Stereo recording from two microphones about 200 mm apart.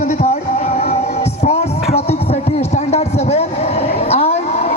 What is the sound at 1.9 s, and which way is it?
Music, 30° left (ahead or behind).